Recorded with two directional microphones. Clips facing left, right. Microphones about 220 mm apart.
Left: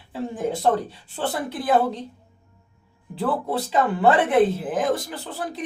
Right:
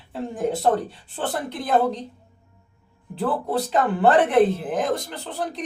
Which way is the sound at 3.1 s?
Centre (ahead or behind).